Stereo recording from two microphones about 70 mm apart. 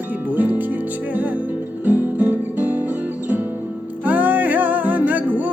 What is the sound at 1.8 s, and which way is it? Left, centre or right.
Guitar, right.